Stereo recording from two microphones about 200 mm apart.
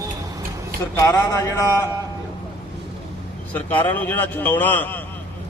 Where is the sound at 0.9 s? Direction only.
15° left (ahead or behind).